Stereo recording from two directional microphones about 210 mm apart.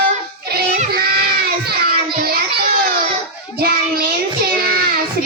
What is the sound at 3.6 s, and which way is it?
Child singing, 45° right (ahead or behind).